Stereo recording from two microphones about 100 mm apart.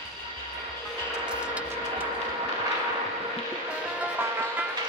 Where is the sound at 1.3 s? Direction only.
10° right (ahead or behind).